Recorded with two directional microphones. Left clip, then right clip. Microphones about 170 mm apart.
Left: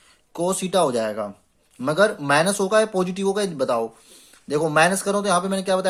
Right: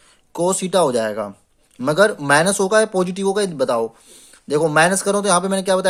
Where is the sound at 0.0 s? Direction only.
40° right (ahead or behind).